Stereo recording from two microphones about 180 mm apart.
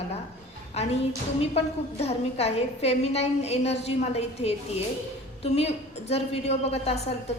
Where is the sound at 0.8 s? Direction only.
35° left (ahead or behind).